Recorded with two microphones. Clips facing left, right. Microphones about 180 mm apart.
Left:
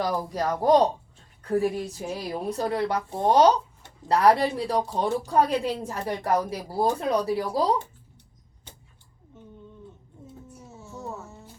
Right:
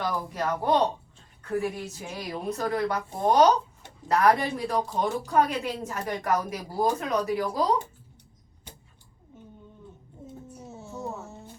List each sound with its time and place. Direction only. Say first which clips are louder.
0.0 s a woman's voice: left 3 dB; 40° left (ahead or behind)